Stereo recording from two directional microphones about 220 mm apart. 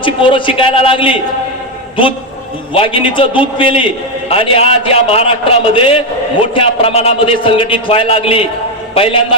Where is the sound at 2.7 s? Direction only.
25° left (ahead or behind).